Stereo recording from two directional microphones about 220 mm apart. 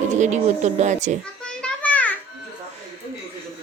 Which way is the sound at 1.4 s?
5° left (ahead or behind).